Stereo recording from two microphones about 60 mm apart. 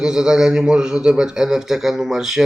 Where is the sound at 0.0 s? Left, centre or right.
Centre.